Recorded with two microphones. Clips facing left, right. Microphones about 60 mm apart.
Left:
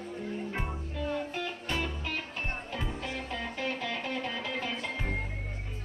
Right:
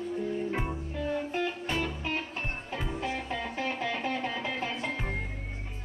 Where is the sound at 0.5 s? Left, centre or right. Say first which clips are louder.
Right 3 dB; centre.